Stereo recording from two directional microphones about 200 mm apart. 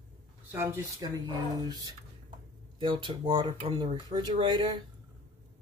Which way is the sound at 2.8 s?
25° right (ahead or behind).